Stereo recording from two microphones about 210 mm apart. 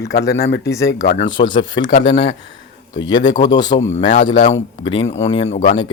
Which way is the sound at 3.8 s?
35° left (ahead or behind).